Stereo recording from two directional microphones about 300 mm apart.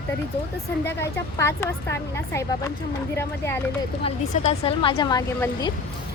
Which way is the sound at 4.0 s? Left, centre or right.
Centre.